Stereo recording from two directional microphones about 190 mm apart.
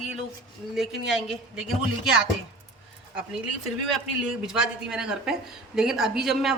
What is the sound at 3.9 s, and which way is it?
Speech, 5° right (ahead or behind).